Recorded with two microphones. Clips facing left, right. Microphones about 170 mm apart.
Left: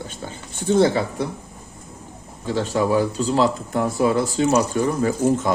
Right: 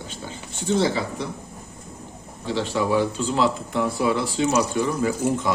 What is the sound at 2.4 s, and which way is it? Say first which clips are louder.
Speech: left 3 dB; 45° left (ahead or behind).